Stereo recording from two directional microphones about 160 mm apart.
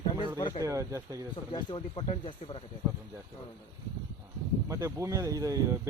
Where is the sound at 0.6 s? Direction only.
20° right (ahead or behind).